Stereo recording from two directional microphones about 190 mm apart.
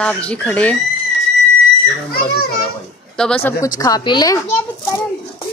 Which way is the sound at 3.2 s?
5° left (ahead or behind).